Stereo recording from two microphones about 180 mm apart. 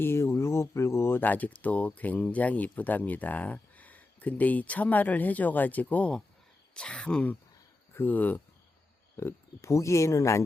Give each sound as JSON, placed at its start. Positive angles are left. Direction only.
{"t": 0.0, "sound": "speech", "side_deg": 15}